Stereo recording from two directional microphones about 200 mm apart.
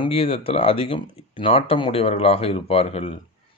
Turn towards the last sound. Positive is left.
turn(degrees=30)  # may be behind; listen again after turning